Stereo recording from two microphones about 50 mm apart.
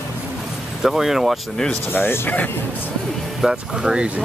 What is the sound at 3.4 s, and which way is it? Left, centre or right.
Speech, centre.